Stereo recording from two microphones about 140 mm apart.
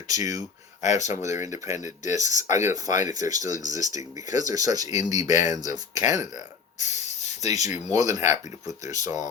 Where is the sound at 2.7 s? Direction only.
25° right (ahead or behind).